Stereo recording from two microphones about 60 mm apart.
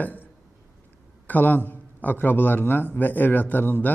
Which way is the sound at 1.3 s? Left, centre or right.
Left.